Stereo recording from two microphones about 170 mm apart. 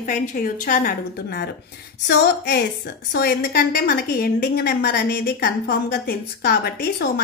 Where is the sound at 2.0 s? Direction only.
90° left.